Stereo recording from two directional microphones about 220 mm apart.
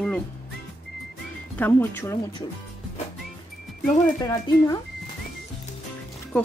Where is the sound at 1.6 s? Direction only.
10° left (ahead or behind).